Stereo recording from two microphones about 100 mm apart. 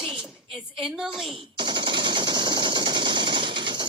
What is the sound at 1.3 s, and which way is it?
Machine gun, 55° right (ahead or behind).